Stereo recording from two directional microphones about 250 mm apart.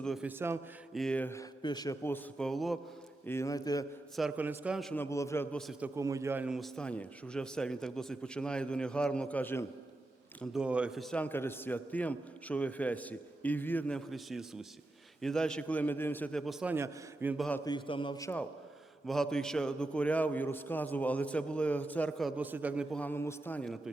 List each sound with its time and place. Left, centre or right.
0.0 s a man's voice: centre
0.9 s a man's voice: centre
3.2 s a man's voice: centre
4.1 s a man's voice: centre
6.0 s a man's voice: centre
10.4 s a man's voice: centre
17.7 s a man's voice: centre